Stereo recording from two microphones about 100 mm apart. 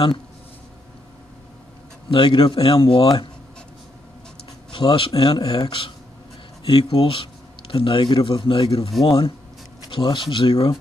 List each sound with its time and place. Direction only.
2.0 s speech: 55° left (ahead or behind)
4.6 s speech: 55° left (ahead or behind)